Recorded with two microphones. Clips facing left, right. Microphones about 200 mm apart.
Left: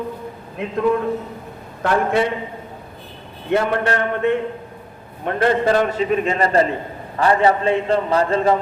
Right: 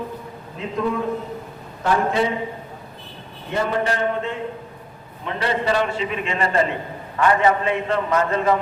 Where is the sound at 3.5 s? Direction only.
65° left (ahead or behind).